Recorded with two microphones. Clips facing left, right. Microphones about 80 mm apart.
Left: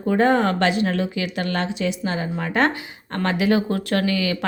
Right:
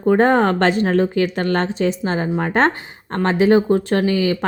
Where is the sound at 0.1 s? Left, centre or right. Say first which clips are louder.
Right 4 dB; right.